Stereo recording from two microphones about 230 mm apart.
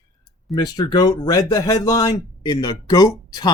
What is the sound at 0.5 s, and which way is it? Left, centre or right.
Speech, centre.